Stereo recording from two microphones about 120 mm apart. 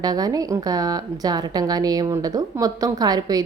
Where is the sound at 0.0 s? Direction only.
35° right (ahead or behind).